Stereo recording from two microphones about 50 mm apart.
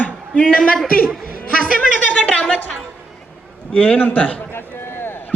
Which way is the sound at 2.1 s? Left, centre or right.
Left.